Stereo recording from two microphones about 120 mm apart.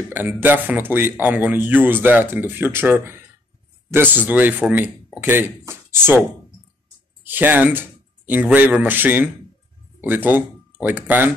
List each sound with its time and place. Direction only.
0.1 s speech: 15° right (ahead or behind)
7.2 s speech: 15° right (ahead or behind)